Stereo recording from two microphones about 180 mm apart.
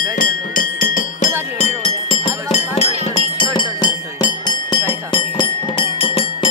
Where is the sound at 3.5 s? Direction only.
25° left (ahead or behind).